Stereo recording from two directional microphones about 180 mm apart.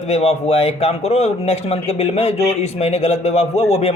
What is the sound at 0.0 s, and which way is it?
A man's voice, 35° left (ahead or behind).